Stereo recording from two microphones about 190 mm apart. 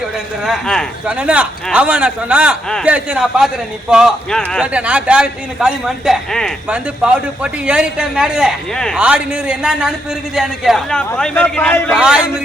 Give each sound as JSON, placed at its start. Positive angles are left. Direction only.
{"t": 0.4, "sound": "a man's voice", "side_deg": 0}
{"t": 11.9, "sound": "a man's voice", "side_deg": -5}